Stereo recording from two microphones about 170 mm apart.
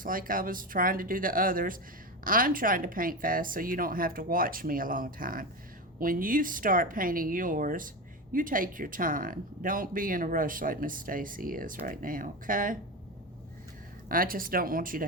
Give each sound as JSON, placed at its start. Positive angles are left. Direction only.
{"t": 0.0, "sound": "speech", "side_deg": -55}
{"t": 14.1, "sound": "speech", "side_deg": -55}